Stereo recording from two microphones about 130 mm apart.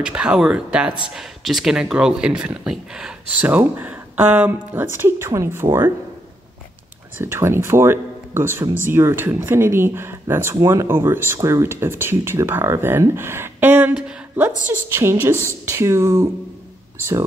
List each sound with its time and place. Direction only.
0.0 s speech: 5° right (ahead or behind)
7.2 s speech: 20° right (ahead or behind)